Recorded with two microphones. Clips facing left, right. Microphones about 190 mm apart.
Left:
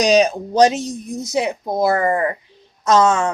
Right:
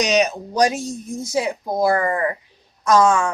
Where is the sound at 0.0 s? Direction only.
30° left (ahead or behind).